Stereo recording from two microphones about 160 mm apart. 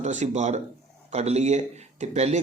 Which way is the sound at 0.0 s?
45° right (ahead or behind).